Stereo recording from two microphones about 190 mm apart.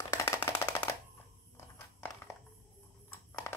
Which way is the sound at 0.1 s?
15° left (ahead or behind).